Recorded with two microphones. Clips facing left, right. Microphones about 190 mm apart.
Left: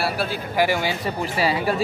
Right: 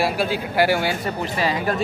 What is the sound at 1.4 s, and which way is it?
Speech, 10° left (ahead or behind).